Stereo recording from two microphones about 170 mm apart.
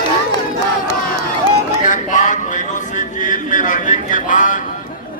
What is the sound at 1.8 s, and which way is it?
Speech, 50° left (ahead or behind).